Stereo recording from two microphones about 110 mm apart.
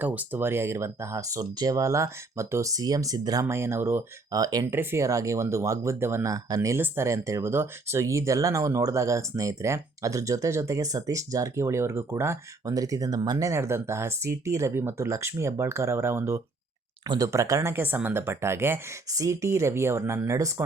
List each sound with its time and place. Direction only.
0.0 s speech: 15° right (ahead or behind); by 3.4 s 35° right (ahead or behind)
3.4 s speech: 20° right (ahead or behind)
4.3 s speech: 35° right (ahead or behind)
4.6 s speech: 20° right (ahead or behind); by 13.5 s 35° right (ahead or behind)
13.5 s speech: 25° right (ahead or behind)